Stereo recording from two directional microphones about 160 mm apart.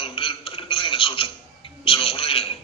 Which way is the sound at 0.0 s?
35° left (ahead or behind).